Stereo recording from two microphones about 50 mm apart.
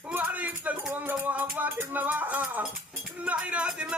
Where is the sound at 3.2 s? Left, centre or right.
Right.